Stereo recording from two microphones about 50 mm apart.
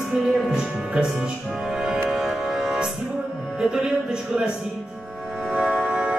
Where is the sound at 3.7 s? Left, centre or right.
Centre.